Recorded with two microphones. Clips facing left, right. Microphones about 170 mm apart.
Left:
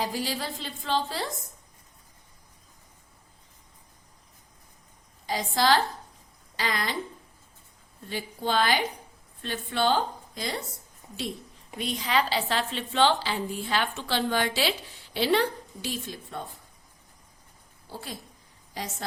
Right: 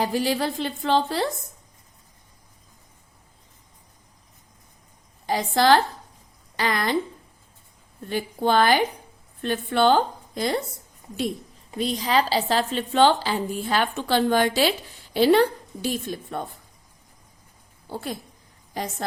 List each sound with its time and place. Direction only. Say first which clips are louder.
0.0 s a woman's voice: right 7 dB; 60° right (ahead or behind)
5.2 s a woman's voice: right 5 dB; 60° right (ahead or behind)
8.1 s a woman's voice: right 6 dB; 55° right (ahead or behind)
11.8 s a woman's voice: right 5 dB; 35° right (ahead or behind); by 16.4 s 50° right (ahead or behind)
17.8 s a woman's voice: right 8 dB; 55° right (ahead or behind)